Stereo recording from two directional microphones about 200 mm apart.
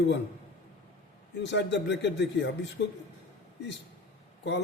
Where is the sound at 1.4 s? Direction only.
60° left (ahead or behind).